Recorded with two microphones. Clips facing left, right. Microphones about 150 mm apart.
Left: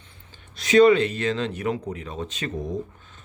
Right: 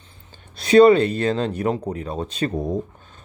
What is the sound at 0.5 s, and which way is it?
Speech, 30° right (ahead or behind).